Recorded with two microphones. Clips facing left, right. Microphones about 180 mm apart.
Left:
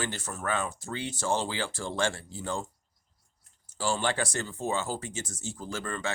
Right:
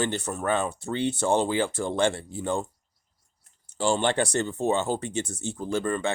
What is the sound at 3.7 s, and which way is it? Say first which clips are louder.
Speech: right 5 dB; 25° right (ahead or behind).